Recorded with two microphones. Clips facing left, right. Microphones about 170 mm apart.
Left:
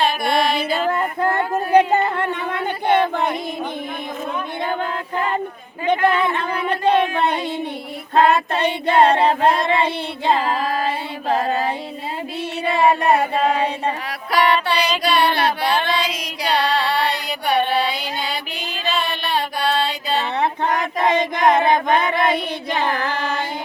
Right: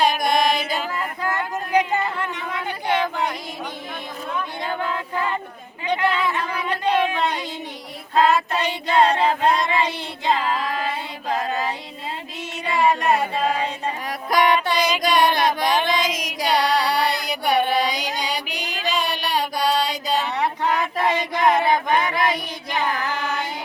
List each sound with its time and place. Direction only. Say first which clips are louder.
0.0 s music: even; 15° right (ahead or behind)
0.9 s a sound: left 7 dB; 55° left (ahead or behind)
5.8 s a sound: left 4 dB; 55° left (ahead or behind)
8.1 s child singing: left 2 dB; 60° left (ahead or behind); by 10.8 s 35° left (ahead or behind)
11.3 s mantra: left 5 dB; 55° left (ahead or behind)
13.1 s chant: left 3 dB; 60° left (ahead or behind)
14.3 s a sound: left 1 dB; 15° right (ahead or behind)
16.1 s chant: even; 15° right (ahead or behind)
20.3 s a sound: left 2 dB; 55° left (ahead or behind)
21.1 s chant: left 4 dB; 55° left (ahead or behind)
22.3 s child singing: left 5 dB; 55° left (ahead or behind)
23.0 s carnatic music: left 3 dB; 60° left (ahead or behind)